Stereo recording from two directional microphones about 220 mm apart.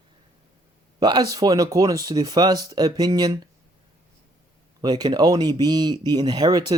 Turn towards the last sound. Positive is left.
turn(degrees=-20)  # may be behind; listen again after turning